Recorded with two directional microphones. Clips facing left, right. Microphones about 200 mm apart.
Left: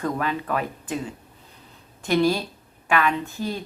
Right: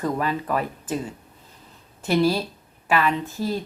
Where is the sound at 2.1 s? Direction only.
Centre (ahead or behind).